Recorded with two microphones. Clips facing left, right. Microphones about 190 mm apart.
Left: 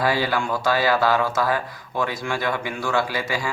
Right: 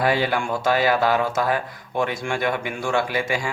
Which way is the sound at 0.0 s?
20° right (ahead or behind).